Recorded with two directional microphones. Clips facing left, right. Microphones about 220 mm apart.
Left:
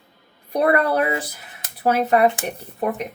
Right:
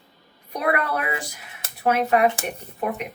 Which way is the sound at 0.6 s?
35° left (ahead or behind).